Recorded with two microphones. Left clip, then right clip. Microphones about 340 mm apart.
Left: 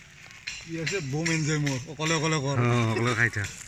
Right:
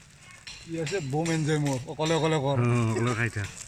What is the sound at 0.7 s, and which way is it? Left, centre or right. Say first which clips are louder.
Speech: right 2 dB; right.